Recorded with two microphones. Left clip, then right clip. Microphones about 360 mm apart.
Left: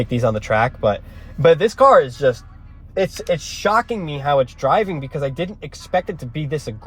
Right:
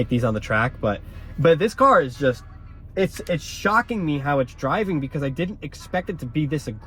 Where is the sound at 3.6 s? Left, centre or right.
Left.